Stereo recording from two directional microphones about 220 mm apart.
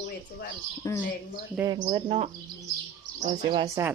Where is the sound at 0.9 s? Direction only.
15° left (ahead or behind).